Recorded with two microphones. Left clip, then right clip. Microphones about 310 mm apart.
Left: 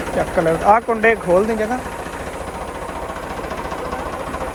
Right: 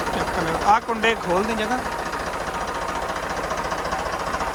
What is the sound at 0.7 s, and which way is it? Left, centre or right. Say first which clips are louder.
Speech: left 4 dB; centre.